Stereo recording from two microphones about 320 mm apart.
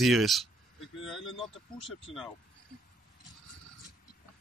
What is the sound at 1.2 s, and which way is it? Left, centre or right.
Speech, centre.